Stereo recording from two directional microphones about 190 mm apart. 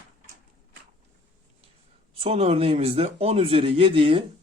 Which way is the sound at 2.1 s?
30° right (ahead or behind).